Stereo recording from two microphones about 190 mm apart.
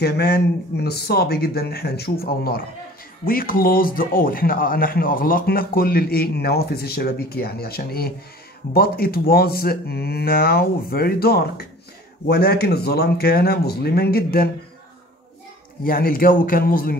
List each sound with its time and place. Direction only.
0.0 s a man's voice: 55° left (ahead or behind)
15.8 s a man's voice: 50° left (ahead or behind)